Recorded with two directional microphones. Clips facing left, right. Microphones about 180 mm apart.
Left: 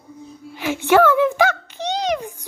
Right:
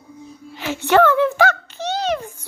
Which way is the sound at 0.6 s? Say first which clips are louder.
Even; 15° left (ahead or behind).